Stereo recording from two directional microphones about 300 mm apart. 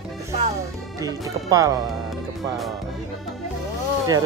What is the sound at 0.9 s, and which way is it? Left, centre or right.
Speech, centre.